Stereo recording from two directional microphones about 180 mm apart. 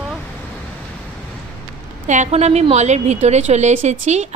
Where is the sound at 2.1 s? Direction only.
40° right (ahead or behind).